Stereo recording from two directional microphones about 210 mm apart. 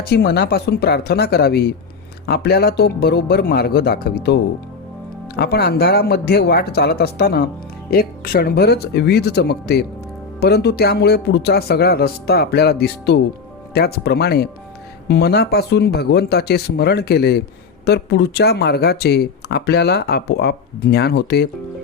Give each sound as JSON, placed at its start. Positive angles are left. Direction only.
{"t": 0.0, "sound": "speech", "side_deg": 50}
{"t": 5.4, "sound": "speech", "side_deg": 50}